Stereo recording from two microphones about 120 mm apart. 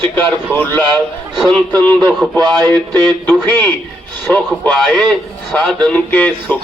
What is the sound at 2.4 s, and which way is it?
Speech, 35° right (ahead or behind).